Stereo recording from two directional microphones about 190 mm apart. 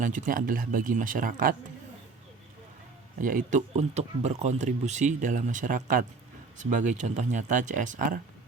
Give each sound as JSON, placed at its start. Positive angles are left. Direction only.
{"t": 0.0, "sound": "speech", "side_deg": -45}
{"t": 3.2, "sound": "speech", "side_deg": -45}